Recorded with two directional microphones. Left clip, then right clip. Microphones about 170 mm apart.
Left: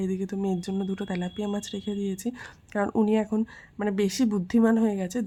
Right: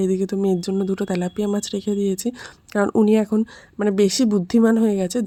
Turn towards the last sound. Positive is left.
turn(degrees=-35)  # may be behind; listen again after turning